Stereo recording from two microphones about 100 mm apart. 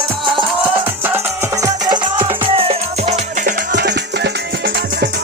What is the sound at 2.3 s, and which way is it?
Music, 65° right (ahead or behind).